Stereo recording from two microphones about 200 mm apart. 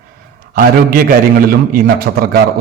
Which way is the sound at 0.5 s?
45° right (ahead or behind).